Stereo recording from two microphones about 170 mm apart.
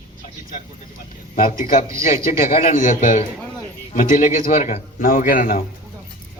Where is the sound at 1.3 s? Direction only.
50° left (ahead or behind).